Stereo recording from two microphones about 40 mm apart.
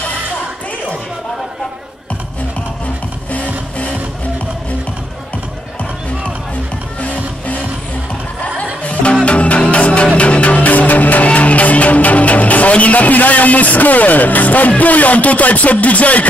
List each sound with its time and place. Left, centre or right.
3.3 s music: left
7.0 s music: left
8.8 s music: left